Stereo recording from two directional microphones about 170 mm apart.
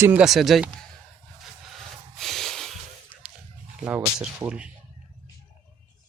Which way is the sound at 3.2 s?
5° right (ahead or behind).